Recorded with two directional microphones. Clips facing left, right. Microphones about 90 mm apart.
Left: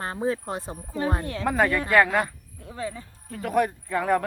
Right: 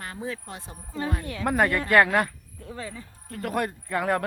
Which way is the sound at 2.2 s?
20° left (ahead or behind).